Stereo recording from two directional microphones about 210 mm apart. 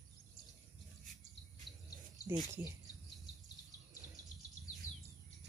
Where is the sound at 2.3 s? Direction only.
15° right (ahead or behind).